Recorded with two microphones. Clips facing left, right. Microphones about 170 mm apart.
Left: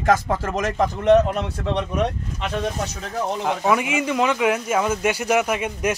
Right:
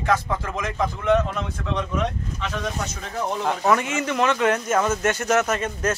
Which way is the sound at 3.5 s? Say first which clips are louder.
Even; 10° left (ahead or behind).